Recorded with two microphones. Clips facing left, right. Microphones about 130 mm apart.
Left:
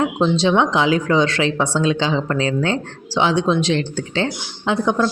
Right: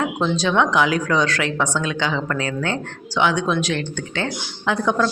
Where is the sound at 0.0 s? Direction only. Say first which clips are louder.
Left 4 dB; 25° left (ahead or behind).